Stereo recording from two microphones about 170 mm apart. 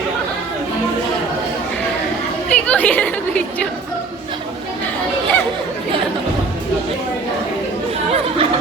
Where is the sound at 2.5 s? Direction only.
10° left (ahead or behind).